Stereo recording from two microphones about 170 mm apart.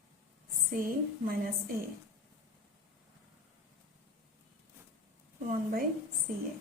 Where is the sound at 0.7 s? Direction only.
55° right (ahead or behind).